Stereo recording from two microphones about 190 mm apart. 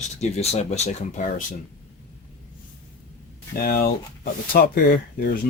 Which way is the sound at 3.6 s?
55° left (ahead or behind).